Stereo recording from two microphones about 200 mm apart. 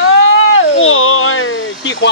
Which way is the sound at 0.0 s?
70° left (ahead or behind).